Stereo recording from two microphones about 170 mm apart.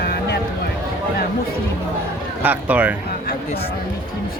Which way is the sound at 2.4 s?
10° right (ahead or behind).